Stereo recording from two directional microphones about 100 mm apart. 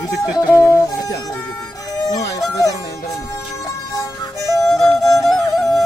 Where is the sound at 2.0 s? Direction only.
35° left (ahead or behind).